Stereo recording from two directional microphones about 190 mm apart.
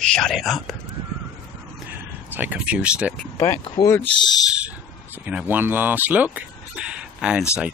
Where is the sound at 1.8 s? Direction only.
10° right (ahead or behind).